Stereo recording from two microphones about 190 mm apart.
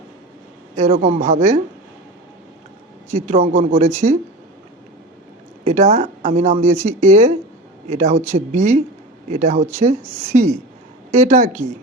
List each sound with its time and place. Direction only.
0.8 s speech: 35° right (ahead or behind)
3.1 s speech: 35° right (ahead or behind)
5.6 s speech: 35° right (ahead or behind)